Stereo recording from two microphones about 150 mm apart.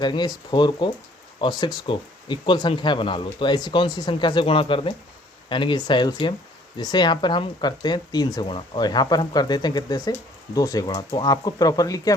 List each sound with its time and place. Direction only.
0.0 s speech: 30° left (ahead or behind)